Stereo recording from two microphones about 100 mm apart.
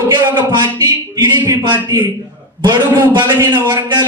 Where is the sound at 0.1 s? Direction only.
50° right (ahead or behind).